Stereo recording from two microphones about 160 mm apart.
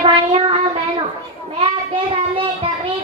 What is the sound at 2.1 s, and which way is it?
Child singing, 35° right (ahead or behind).